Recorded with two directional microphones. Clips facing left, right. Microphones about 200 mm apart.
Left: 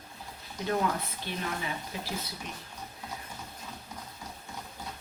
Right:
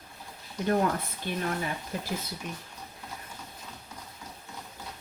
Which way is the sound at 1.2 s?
45° right (ahead or behind).